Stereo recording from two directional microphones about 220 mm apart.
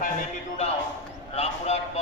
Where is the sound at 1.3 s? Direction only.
30° left (ahead or behind).